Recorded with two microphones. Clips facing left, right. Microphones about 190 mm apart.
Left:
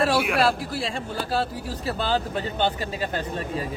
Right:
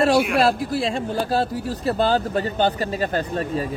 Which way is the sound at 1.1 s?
45° right (ahead or behind).